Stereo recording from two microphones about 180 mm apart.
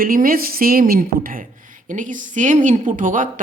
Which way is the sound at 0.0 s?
55° right (ahead or behind).